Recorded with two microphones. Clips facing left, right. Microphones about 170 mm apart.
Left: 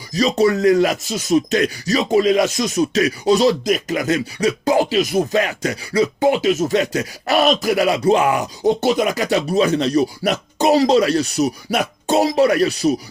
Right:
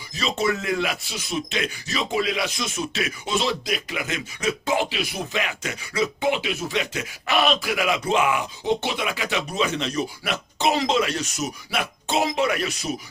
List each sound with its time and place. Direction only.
0.1 s speech: 40° left (ahead or behind)